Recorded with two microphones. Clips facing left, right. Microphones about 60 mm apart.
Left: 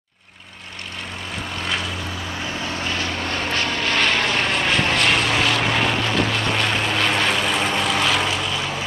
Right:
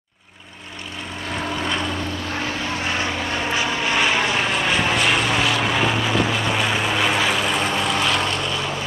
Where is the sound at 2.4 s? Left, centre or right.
Right.